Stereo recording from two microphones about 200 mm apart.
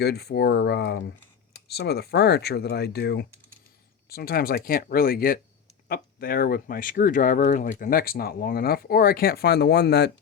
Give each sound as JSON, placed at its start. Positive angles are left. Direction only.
{"t": 0.0, "sound": "speech", "side_deg": 55}